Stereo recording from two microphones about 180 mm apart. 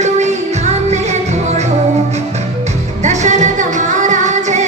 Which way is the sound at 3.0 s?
40° right (ahead or behind).